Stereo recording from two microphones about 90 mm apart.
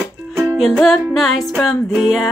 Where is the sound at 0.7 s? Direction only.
5° left (ahead or behind).